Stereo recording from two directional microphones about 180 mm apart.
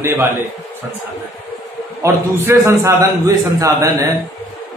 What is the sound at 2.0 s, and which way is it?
A man's voice, 15° right (ahead or behind).